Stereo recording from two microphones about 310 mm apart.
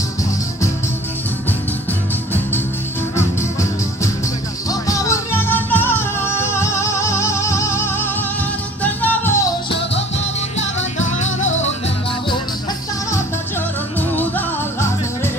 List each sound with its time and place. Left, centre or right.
4.6 s music: centre
11.2 s music: left
13.9 s music: centre